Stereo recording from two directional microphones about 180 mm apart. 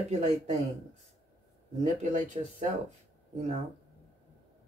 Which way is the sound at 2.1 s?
40° right (ahead or behind).